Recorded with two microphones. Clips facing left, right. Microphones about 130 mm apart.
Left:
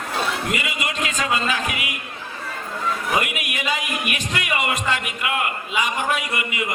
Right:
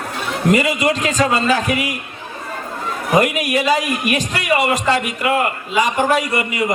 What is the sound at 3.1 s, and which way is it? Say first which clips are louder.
A man's voice: right 13 dB; 40° right (ahead or behind).